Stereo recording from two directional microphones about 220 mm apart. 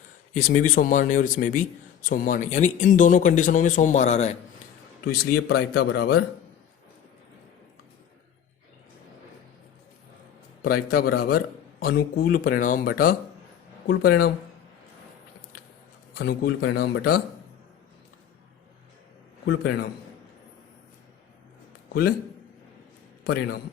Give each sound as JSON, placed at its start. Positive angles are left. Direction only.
{"t": 0.3, "sound": "speech", "side_deg": 35}
{"t": 5.0, "sound": "speech", "side_deg": 45}
{"t": 10.6, "sound": "speech", "side_deg": 45}
{"t": 16.1, "sound": "speech", "side_deg": 45}
{"t": 19.5, "sound": "speech", "side_deg": 45}
{"t": 21.8, "sound": "a sound", "side_deg": 45}
{"t": 23.2, "sound": "speech", "side_deg": 45}